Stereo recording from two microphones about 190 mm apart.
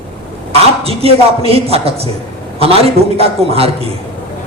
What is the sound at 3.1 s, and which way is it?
Speech, 30° right (ahead or behind).